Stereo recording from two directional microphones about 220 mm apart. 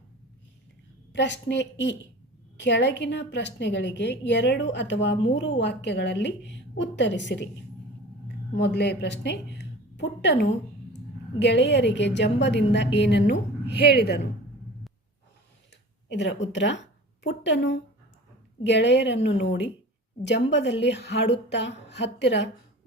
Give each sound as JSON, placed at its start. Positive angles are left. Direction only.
{"t": 1.1, "sound": "a woman's voice", "side_deg": 55}
{"t": 8.5, "sound": "a woman's voice", "side_deg": 50}
{"t": 16.0, "sound": "a woman's voice", "side_deg": 55}